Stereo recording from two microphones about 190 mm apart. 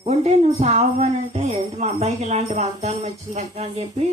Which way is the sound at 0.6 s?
35° right (ahead or behind).